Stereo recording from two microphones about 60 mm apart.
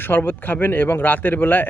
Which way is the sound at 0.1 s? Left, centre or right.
Left.